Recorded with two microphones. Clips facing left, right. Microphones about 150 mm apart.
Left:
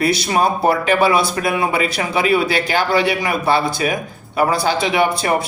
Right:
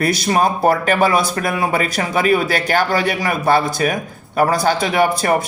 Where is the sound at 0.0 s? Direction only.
45° right (ahead or behind).